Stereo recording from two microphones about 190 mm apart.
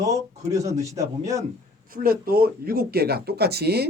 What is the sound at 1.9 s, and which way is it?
Speech, 50° right (ahead or behind).